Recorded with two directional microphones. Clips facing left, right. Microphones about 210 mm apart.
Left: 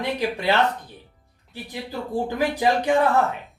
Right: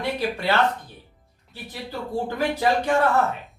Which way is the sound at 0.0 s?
15° left (ahead or behind).